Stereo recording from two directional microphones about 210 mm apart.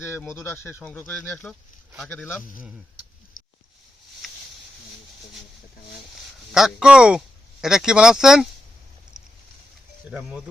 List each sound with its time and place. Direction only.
0.0 s speech: 10° left (ahead or behind)
3.3 s a sound: 40° left (ahead or behind)
6.1 s speech: centre (ahead or behind)
10.1 s speech: 5° right (ahead or behind)